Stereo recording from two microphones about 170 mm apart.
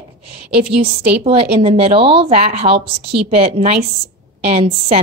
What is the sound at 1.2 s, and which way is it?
A woman's voice, 35° right (ahead or behind).